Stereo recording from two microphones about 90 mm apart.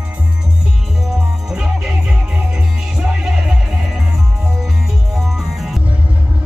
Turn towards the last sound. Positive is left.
turn(degrees=-5)  # may be behind; listen again after turning